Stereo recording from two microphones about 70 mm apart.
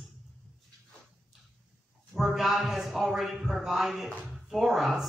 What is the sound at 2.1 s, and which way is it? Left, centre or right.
A man's voice, centre.